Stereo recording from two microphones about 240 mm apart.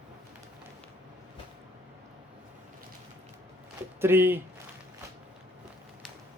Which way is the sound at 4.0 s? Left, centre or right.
Centre.